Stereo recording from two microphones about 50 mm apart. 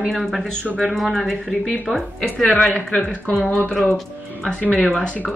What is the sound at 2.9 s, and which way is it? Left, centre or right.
Speech, centre.